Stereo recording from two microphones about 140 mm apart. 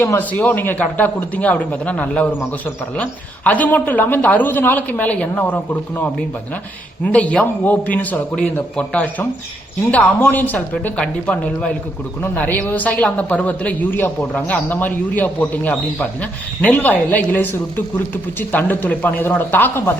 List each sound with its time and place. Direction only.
0.0 s speech: 15° left (ahead or behind)